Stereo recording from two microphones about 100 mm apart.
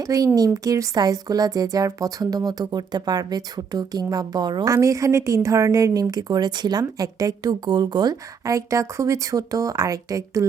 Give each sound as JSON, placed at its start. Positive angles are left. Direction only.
{"t": 0.0, "sound": "a woman's voice", "side_deg": -35}
{"t": 4.7, "sound": "a woman's voice", "side_deg": -30}